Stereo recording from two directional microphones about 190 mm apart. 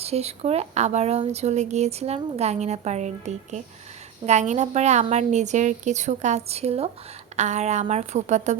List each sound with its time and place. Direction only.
0.0 s speech: 35° right (ahead or behind)